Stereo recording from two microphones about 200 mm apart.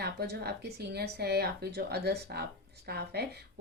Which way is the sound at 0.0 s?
55° right (ahead or behind).